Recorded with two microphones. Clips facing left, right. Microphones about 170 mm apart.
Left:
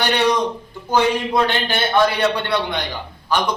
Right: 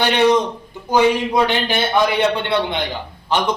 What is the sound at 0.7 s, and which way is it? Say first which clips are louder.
A man's voice: right 4 dB; 15° right (ahead or behind).